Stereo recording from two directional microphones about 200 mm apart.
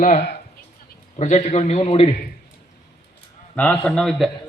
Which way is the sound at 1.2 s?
35° left (ahead or behind).